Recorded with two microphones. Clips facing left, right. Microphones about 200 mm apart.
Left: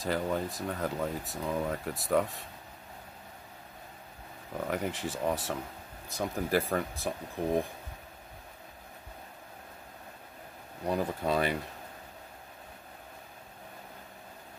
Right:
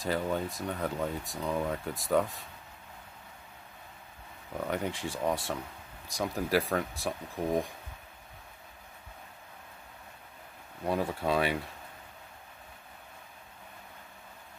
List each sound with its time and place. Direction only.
0.0 s speech: centre (ahead or behind)
4.6 s speech: centre (ahead or behind)
10.9 s speech: centre (ahead or behind)